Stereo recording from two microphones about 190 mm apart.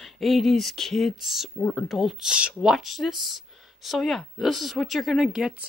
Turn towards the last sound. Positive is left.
turn(degrees=-5)  # may be behind; listen again after turning